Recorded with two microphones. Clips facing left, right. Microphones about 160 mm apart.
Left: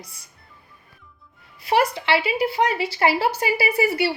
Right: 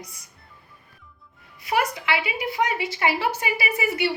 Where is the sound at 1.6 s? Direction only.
30° left (ahead or behind).